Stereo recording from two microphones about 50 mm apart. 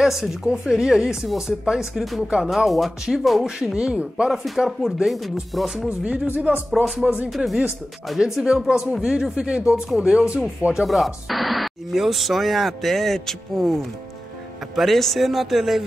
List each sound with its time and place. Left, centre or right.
0.0 s speech: centre
2.2 s speech: centre
2.5 s speech: centre
3.4 s speech: centre
4.3 s speech: centre
5.9 s speech: right
6.7 s speech: centre
7.0 s speech: right
7.2 s speech: centre
10.6 s speech: right
11.2 s speech: centre
14.8 s speech: centre